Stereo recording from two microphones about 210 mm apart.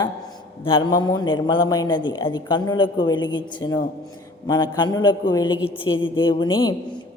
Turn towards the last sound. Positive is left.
turn(degrees=20)  # may be behind; listen again after turning